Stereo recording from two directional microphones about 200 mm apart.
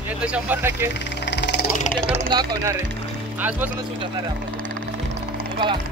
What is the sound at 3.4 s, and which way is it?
Speech, 10° right (ahead or behind).